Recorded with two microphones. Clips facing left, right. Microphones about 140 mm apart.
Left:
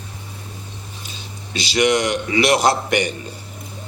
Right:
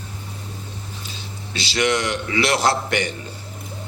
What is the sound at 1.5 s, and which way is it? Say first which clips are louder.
A man's voice: left 4 dB; 15° left (ahead or behind).